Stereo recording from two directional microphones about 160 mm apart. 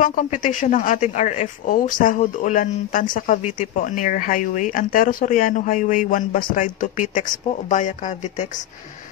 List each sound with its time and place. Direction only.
0.0 s speech: 55° left (ahead or behind)